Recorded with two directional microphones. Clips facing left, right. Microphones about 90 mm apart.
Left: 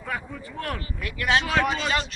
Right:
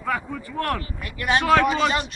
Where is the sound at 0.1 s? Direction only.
90° right.